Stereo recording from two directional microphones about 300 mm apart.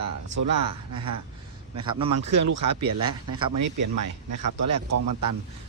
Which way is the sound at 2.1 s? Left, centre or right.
Right.